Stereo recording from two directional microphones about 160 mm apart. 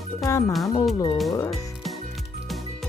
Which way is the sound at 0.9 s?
30° left (ahead or behind).